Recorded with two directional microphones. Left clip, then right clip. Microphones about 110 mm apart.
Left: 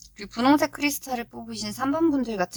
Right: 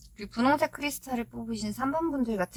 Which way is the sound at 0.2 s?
35° left (ahead or behind).